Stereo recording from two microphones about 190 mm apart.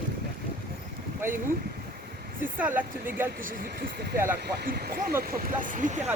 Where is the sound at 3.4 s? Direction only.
50° right (ahead or behind).